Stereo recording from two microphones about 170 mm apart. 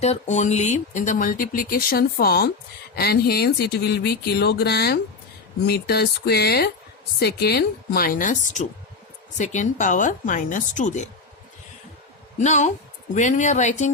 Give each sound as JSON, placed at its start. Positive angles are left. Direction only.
{"t": 0.0, "sound": "a woman's voice", "side_deg": 40}
{"t": 12.4, "sound": "speech", "side_deg": 45}